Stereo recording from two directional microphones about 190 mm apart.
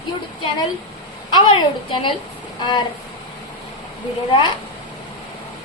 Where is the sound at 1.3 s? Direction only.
25° left (ahead or behind).